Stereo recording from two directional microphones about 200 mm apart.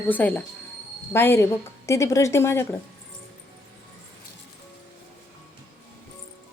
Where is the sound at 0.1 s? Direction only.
5° left (ahead or behind).